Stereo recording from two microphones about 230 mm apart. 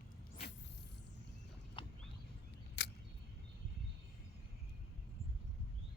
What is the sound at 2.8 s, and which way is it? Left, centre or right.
Single-lens reflex camera, left.